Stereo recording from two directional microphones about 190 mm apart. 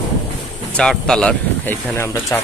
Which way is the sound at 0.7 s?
5° left (ahead or behind).